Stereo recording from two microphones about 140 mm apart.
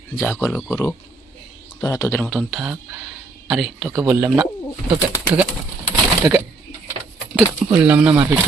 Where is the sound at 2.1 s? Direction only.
10° left (ahead or behind).